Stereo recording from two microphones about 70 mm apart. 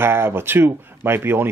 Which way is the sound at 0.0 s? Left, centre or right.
Right.